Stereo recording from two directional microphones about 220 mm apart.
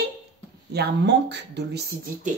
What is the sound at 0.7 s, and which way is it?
Speech, 50° right (ahead or behind).